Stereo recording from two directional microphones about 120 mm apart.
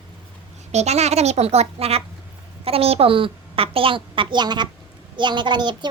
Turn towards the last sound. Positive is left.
turn(degrees=-40)  # may be behind; listen again after turning